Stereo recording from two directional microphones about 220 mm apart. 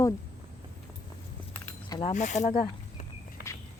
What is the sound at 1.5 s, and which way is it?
Keys jangling, 10° left (ahead or behind).